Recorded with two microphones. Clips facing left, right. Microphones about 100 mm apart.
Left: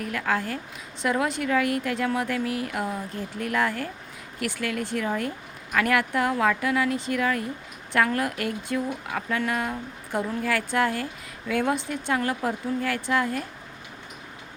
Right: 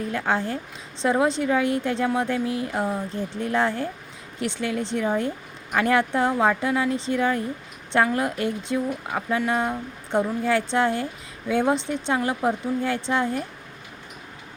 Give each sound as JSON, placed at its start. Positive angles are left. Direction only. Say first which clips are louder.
{"t": 0.0, "sound": "speech", "louder": "right 2 dB", "side_deg": -25}